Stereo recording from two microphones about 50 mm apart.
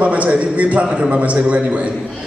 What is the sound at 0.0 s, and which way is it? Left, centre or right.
A man's voice, right.